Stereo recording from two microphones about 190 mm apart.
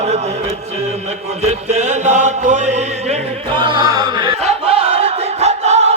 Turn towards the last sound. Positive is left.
turn(degrees=-35)  # may be behind; listen again after turning